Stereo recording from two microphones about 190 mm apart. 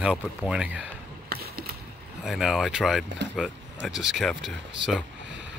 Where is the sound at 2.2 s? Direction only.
Centre (ahead or behind).